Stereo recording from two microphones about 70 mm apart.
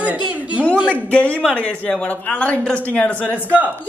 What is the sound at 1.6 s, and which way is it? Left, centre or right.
Speech, centre.